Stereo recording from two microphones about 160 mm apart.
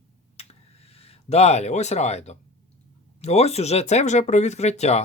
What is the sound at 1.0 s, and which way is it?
Speech, 40° left (ahead or behind).